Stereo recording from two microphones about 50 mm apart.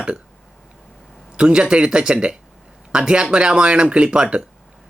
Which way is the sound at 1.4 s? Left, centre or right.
Centre.